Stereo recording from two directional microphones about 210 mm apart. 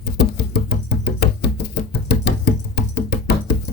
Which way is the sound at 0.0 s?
50° left (ahead or behind).